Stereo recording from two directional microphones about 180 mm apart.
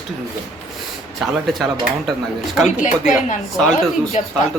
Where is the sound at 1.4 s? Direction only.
Centre (ahead or behind).